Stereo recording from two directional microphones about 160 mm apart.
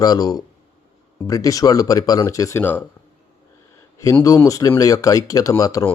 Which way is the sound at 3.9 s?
20° left (ahead or behind).